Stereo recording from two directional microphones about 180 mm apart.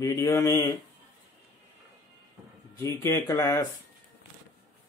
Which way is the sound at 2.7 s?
15° left (ahead or behind).